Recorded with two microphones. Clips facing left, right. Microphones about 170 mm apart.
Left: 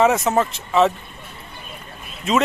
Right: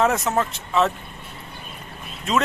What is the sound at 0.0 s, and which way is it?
Speech, centre (ahead or behind).